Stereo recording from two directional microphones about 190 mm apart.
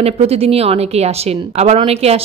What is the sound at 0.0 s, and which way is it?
Speech, 30° right (ahead or behind).